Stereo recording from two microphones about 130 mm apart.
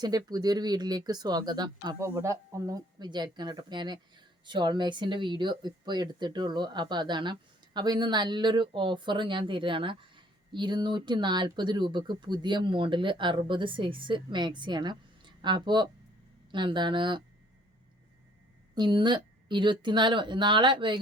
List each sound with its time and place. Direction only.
0.0 s speech: 30° right (ahead or behind)
18.7 s speech: 35° right (ahead or behind)